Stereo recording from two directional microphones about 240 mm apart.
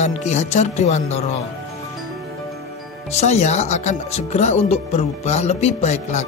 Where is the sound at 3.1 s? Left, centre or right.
Left.